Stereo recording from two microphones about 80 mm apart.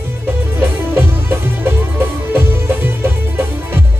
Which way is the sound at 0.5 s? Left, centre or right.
Right.